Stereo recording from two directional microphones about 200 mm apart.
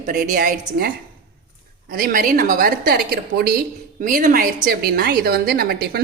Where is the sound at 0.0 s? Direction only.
45° right (ahead or behind).